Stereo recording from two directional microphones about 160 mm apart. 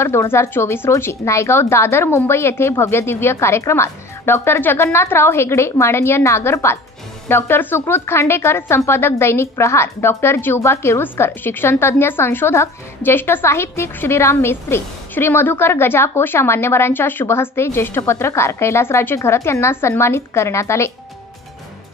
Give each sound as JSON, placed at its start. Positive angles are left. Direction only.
{"t": 0.0, "sound": "a woman's voice", "side_deg": 15}